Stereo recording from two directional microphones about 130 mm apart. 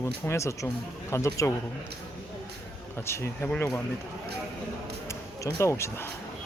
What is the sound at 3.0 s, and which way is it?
Speech, 20° left (ahead or behind).